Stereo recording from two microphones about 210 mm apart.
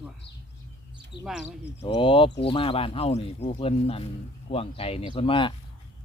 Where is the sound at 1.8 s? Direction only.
25° left (ahead or behind).